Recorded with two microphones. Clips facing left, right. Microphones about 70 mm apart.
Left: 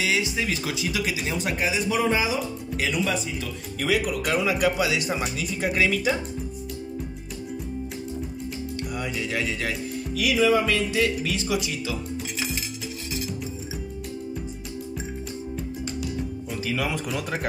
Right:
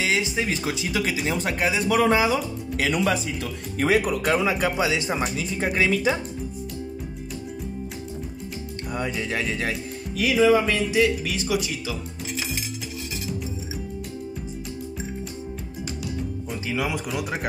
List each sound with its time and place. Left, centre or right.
0.0 s speech: right
1.3 s speech: right
1.9 s speech: right
3.7 s music: right
4.3 s speech: right
8.9 s music: right
10.1 s speech: right
10.9 s music: centre
16.6 s speech: centre